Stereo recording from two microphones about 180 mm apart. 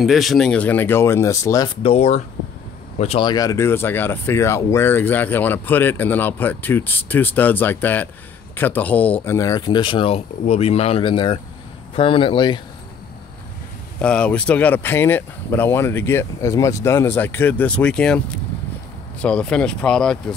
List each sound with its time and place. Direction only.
0.0 s speech: centre (ahead or behind); by 1.7 s 20° left (ahead or behind)
1.8 s speech: 35° left (ahead or behind)
14.0 s speech: 5° left (ahead or behind)